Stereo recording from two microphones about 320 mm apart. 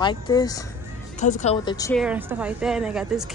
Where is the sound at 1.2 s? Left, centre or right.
Left.